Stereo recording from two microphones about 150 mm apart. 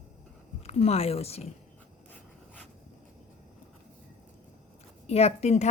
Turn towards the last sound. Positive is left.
turn(degrees=45)  # may be behind; listen again after turning